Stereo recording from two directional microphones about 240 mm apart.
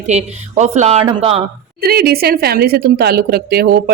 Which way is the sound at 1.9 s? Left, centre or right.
Right.